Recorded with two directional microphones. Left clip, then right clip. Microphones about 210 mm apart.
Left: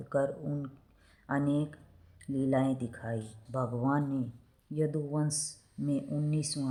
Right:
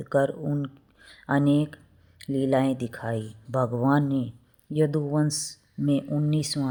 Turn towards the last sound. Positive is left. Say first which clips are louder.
# right 8 dB
turn(degrees=-35)  # may be behind; listen again after turning